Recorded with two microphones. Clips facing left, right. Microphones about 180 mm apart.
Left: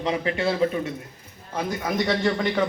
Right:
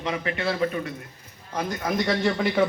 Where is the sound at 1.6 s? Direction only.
5° left (ahead or behind).